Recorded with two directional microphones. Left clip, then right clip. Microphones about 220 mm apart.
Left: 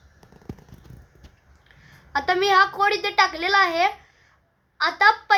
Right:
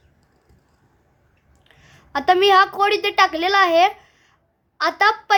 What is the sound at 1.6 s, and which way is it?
A woman's voice, 50° right (ahead or behind).